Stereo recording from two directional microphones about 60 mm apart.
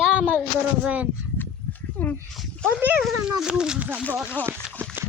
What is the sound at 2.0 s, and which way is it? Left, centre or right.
Speech, left.